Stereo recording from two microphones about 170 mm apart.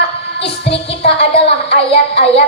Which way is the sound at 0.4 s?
85° left.